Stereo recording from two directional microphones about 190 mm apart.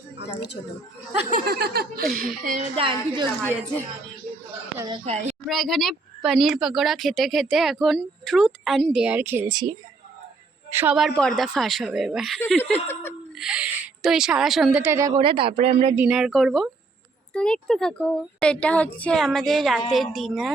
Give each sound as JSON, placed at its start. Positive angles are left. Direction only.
{"t": 1.3, "sound": "speech", "side_deg": -55}
{"t": 2.4, "sound": "speech", "side_deg": -45}
{"t": 2.7, "sound": "a woman's voice", "side_deg": -25}
{"t": 5.0, "sound": "a woman's voice", "side_deg": -35}
{"t": 5.5, "sound": "speech", "side_deg": 0}
{"t": 9.5, "sound": "a woman's voice", "side_deg": -20}
{"t": 10.9, "sound": "speech", "side_deg": 0}
{"t": 12.9, "sound": "laughter", "side_deg": 10}
{"t": 13.4, "sound": "speech", "side_deg": -5}
{"t": 14.8, "sound": "a woman's voice", "side_deg": -15}
{"t": 16.0, "sound": "speech", "side_deg": -5}